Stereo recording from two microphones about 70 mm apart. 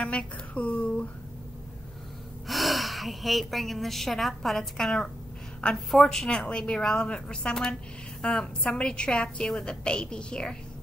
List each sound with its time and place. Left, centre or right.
0.0 s a woman's voice: centre
2.4 s a woman's voice: centre